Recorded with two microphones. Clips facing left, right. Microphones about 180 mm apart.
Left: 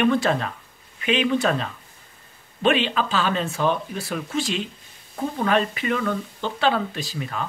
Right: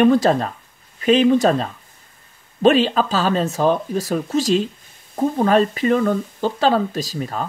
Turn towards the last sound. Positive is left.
turn(degrees=-40)  # may be behind; listen again after turning